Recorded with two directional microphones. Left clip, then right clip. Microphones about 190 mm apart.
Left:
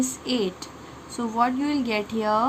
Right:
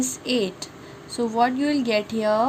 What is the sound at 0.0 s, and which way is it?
Speech, 25° right (ahead or behind).